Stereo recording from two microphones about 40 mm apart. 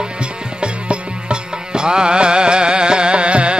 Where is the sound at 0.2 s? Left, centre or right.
Right.